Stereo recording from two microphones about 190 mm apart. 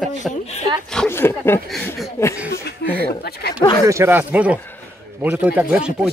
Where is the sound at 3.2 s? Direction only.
60° left (ahead or behind).